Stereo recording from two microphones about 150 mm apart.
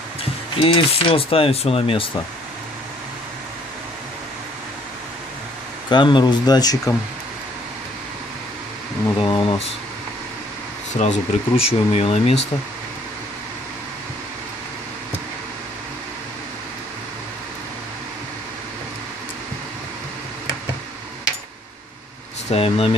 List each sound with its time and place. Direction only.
0.6 s speech: 35° left (ahead or behind)
5.9 s speech: 30° left (ahead or behind)
9.2 s speech: 30° left (ahead or behind)
11.0 s speech: 45° left (ahead or behind)
22.5 s speech: 40° left (ahead or behind)